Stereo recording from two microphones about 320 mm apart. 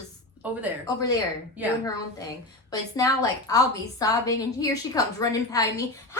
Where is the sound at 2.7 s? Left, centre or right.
Centre.